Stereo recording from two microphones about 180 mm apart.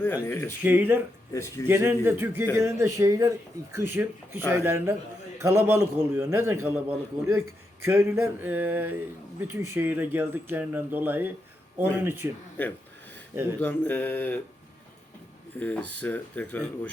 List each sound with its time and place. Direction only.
0.0 s speech: 10° left (ahead or behind)
0.6 s speech: 10° right (ahead or behind)
1.3 s speech: 15° left (ahead or behind)
1.6 s speech: 10° right (ahead or behind)
12.6 s speech: 10° left (ahead or behind)
13.3 s speech: 15° right (ahead or behind)
13.6 s speech: 10° left (ahead or behind)
15.5 s speech: 10° left (ahead or behind)